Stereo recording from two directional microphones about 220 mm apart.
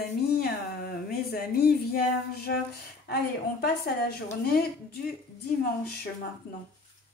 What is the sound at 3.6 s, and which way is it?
Speech, 45° left (ahead or behind).